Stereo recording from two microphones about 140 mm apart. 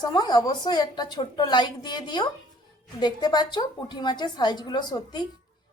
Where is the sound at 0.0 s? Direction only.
30° left (ahead or behind).